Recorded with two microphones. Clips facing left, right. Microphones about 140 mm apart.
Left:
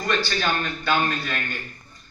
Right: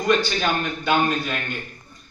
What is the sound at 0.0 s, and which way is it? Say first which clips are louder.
A man's voice: right 4 dB; 20° right (ahead or behind).